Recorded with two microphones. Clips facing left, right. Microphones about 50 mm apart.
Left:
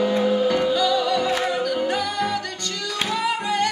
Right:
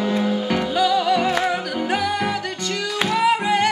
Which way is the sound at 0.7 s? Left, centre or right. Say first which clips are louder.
Right 2 dB; right.